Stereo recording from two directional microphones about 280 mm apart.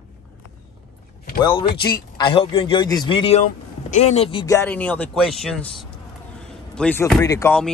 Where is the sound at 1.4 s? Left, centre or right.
Centre.